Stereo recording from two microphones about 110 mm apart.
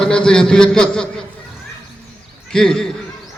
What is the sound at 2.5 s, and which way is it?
Speech, 5° left (ahead or behind).